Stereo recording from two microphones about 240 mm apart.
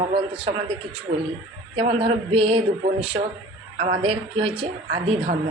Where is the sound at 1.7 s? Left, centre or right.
Right.